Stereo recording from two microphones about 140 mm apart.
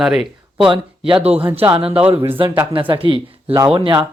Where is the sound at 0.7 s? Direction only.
40° right (ahead or behind).